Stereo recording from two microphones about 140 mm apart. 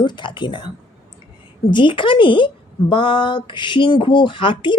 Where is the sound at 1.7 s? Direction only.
35° left (ahead or behind).